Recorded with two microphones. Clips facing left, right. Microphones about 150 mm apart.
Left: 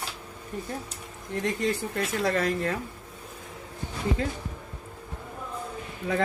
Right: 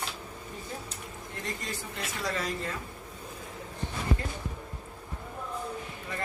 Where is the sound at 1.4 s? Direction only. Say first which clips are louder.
Left 10 dB; 65° left (ahead or behind).